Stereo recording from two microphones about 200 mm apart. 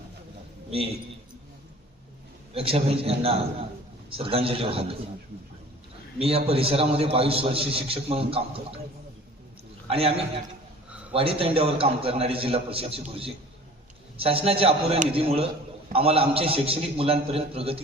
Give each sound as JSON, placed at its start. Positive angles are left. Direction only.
{"t": 2.6, "sound": "a man's voice", "side_deg": -30}
{"t": 6.1, "sound": "a man's voice", "side_deg": -30}
{"t": 9.9, "sound": "a man's voice", "side_deg": -30}